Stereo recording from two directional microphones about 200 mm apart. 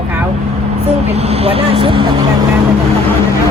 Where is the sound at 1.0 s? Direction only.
30° right (ahead or behind).